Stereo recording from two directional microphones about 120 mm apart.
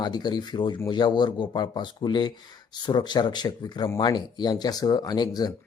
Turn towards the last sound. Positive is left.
turn(degrees=35)  # may be behind; listen again after turning